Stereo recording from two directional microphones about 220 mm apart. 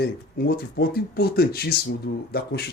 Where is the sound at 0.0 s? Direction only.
45° left (ahead or behind).